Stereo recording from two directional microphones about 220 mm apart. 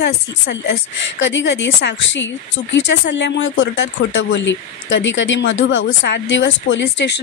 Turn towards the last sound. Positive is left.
turn(degrees=55)  # may be behind; listen again after turning